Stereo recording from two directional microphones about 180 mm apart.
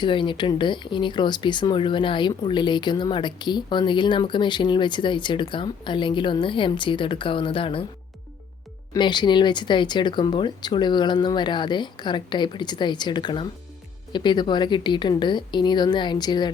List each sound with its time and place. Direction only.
0.0 s speech: 25° left (ahead or behind)
8.9 s speech: 25° left (ahead or behind)